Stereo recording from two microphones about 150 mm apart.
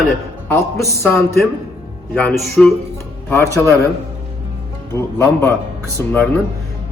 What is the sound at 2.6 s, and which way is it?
Speech, centre (ahead or behind).